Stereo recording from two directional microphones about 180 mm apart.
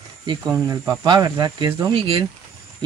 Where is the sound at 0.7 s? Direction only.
15° right (ahead or behind).